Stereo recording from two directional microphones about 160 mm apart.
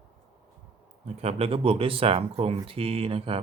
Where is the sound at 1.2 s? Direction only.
40° right (ahead or behind).